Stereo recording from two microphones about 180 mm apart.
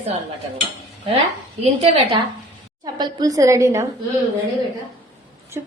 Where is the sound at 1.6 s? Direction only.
35° right (ahead or behind).